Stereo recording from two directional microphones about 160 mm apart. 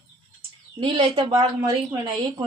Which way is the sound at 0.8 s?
25° right (ahead or behind).